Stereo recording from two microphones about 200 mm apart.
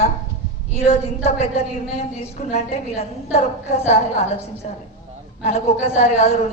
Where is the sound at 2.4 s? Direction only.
30° left (ahead or behind).